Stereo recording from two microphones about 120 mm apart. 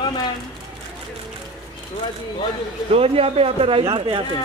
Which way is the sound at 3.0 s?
55° right (ahead or behind).